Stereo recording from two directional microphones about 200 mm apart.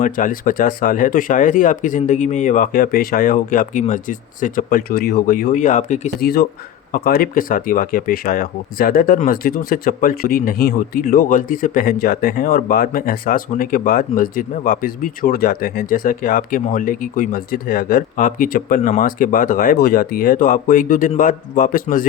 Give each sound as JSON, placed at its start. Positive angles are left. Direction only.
{"t": 0.0, "sound": "speech", "side_deg": 40}
{"t": 6.1, "sound": "speech", "side_deg": 50}